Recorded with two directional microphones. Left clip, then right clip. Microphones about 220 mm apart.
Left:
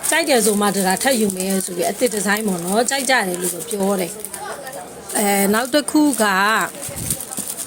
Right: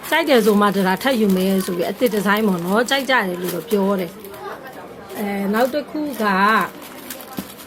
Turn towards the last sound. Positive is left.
turn(degrees=25)  # may be behind; listen again after turning